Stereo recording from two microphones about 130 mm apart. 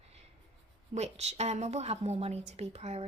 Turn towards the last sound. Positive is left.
turn(degrees=-55)  # may be behind; listen again after turning